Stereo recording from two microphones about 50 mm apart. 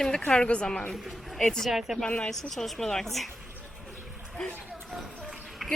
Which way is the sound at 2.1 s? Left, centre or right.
Left.